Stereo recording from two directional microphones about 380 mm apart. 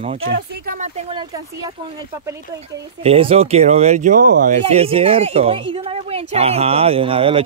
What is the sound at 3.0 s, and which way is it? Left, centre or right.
Speech, centre.